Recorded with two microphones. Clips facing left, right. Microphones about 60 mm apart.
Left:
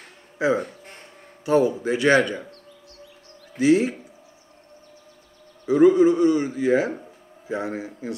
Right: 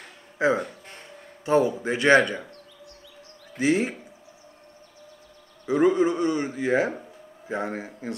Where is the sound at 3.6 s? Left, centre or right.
Right.